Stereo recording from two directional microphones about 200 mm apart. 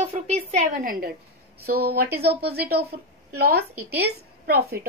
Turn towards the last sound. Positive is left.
turn(degrees=-50)  # may be behind; listen again after turning